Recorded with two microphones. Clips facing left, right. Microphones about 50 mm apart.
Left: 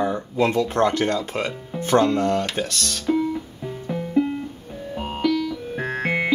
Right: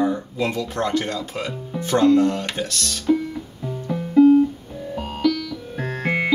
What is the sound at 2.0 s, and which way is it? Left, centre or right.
Speech, centre.